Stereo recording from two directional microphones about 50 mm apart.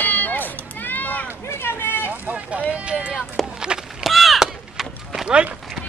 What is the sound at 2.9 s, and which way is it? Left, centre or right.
Speech, right.